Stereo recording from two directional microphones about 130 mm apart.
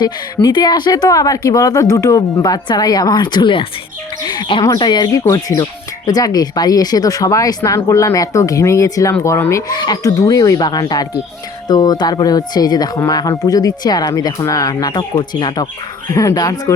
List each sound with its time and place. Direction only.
0.0 s speech: 35° left (ahead or behind)
4.2 s bird: 35° left (ahead or behind)
4.6 s speech: 30° left (ahead or behind)
16.0 s speech: 25° left (ahead or behind)